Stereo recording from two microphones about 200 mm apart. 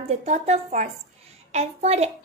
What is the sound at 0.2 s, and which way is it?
A woman's voice, 35° right (ahead or behind).